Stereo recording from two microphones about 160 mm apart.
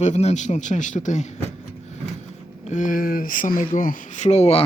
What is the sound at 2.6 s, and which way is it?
Speech, 50° left (ahead or behind).